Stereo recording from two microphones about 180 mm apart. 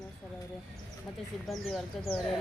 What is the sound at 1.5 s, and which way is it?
Speech, centre (ahead or behind).